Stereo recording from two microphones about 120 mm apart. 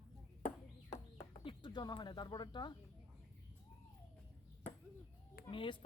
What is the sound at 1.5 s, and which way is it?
Speech, 40° left (ahead or behind).